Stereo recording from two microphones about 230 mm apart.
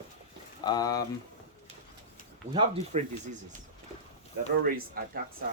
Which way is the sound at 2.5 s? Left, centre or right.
Right.